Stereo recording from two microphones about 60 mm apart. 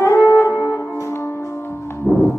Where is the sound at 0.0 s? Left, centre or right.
Left.